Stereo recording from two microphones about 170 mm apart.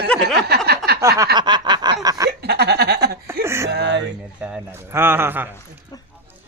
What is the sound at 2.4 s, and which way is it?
Laughter, 75° right (ahead or behind).